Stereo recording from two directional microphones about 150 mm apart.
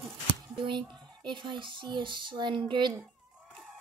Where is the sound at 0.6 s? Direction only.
30° right (ahead or behind).